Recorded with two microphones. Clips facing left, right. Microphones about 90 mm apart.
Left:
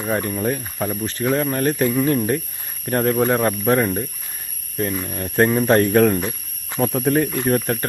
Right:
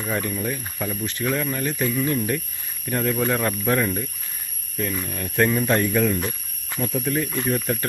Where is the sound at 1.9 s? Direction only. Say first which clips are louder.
Left 5 dB; 30° left (ahead or behind).